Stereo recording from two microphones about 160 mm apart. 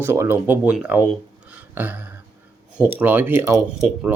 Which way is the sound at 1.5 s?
10° right (ahead or behind).